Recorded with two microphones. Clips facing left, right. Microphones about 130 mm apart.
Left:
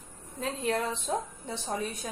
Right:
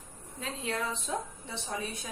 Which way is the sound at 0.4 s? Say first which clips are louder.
Left 5 dB; 45° left (ahead or behind).